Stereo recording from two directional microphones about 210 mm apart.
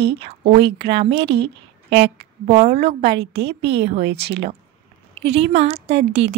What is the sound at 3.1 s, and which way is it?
A woman's voice, 50° right (ahead or behind).